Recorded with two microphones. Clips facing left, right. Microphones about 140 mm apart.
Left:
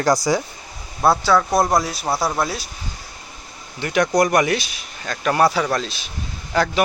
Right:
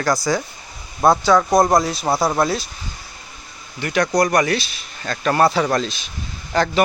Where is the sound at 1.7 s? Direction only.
5° left (ahead or behind).